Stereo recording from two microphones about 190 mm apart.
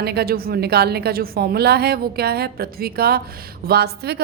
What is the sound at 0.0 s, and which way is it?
A woman's voice, 55° right (ahead or behind).